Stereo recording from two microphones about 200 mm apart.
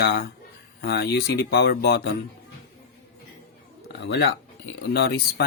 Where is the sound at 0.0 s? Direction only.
50° left (ahead or behind).